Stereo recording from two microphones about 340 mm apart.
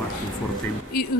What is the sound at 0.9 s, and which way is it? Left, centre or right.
Speech, left.